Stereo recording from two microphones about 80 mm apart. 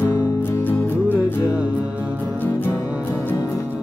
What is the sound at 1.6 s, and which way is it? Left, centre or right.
Music, centre.